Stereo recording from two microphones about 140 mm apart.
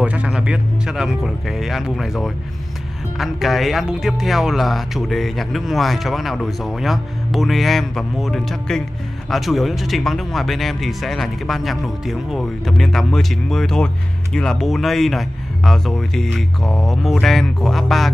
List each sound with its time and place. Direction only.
0.0 s speech: 10° right (ahead or behind)